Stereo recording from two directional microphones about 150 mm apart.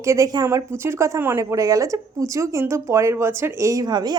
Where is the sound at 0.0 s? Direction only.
20° right (ahead or behind).